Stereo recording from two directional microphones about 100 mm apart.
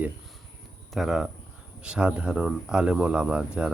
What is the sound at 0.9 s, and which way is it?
Speech, 5° right (ahead or behind).